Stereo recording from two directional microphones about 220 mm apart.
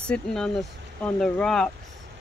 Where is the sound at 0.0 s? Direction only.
5° left (ahead or behind).